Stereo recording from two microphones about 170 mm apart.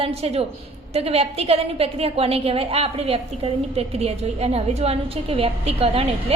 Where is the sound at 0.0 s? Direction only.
35° right (ahead or behind).